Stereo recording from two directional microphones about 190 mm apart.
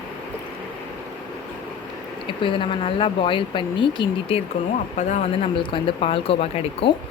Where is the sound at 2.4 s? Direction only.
25° left (ahead or behind).